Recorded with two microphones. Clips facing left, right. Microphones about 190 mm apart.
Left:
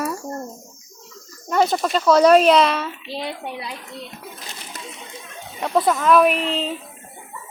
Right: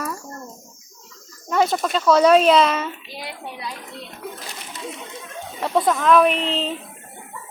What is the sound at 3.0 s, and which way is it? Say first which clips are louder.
Speech: left 5 dB; 25° left (ahead or behind).